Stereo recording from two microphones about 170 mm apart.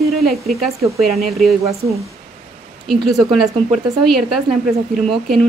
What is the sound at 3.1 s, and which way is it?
A woman's voice, centre (ahead or behind).